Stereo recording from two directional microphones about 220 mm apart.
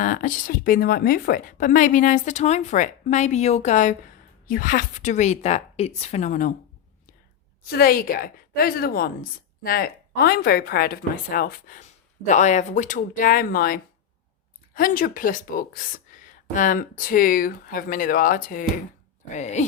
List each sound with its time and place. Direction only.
0.0 s speech: 40° left (ahead or behind)
7.7 s a woman's voice: 40° left (ahead or behind)